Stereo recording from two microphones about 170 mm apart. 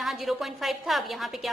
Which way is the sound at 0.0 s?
Centre (ahead or behind).